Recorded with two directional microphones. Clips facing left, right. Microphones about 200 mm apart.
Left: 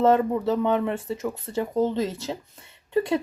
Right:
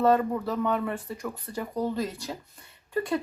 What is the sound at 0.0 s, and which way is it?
Speech, 25° left (ahead or behind).